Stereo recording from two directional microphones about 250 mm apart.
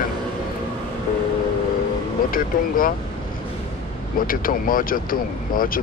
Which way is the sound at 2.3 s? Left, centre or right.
Left.